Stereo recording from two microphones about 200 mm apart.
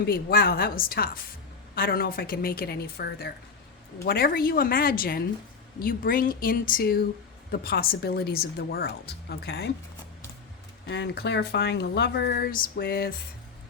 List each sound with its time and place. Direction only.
0.0 s a woman's voice: 50° left (ahead or behind)
10.8 s speech: 60° left (ahead or behind)